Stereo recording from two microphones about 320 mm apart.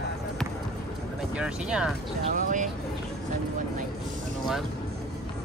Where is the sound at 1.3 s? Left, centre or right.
Centre.